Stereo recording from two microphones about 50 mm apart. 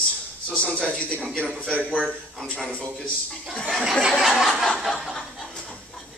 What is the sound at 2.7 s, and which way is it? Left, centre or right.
Speech, left.